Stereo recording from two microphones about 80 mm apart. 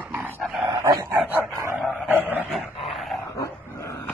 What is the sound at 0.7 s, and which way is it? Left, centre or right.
Dog, right.